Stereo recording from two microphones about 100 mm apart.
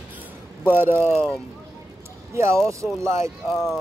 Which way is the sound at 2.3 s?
25° right (ahead or behind).